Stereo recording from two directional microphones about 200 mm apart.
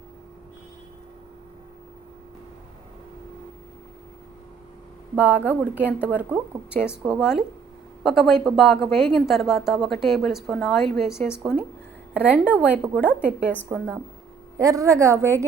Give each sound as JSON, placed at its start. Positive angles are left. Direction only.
{"t": 5.1, "sound": "a woman's voice", "side_deg": -10}